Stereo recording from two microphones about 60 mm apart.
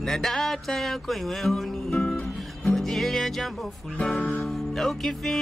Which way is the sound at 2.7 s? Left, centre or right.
Centre.